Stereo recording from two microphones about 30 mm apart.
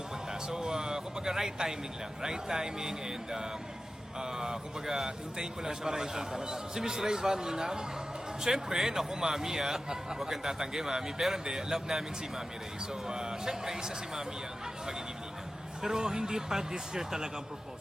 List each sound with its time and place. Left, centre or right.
0.4 s a man's voice: right
13.1 s a man's voice: right
15.8 s speech: centre